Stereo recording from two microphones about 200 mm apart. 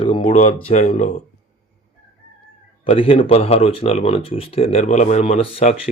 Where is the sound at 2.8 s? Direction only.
25° left (ahead or behind).